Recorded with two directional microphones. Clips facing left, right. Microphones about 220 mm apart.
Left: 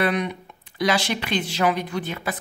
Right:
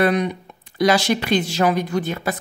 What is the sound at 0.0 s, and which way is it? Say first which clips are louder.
Speech: right 5 dB; 40° right (ahead or behind).